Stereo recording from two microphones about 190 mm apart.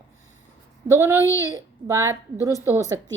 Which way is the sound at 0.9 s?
15° right (ahead or behind).